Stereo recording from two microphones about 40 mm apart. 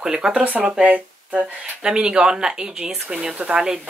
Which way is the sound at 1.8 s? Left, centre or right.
Right.